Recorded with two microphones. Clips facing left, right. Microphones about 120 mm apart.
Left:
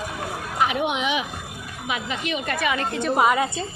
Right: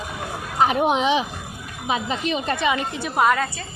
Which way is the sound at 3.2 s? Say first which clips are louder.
Right 1 dB; 5° left (ahead or behind).